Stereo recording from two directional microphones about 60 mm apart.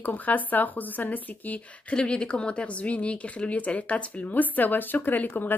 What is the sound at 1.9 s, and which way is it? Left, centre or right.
Speech, centre.